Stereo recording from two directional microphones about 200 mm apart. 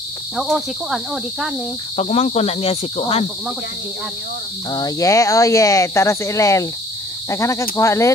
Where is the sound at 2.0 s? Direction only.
30° left (ahead or behind).